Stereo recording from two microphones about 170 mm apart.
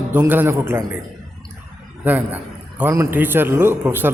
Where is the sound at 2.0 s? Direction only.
10° right (ahead or behind).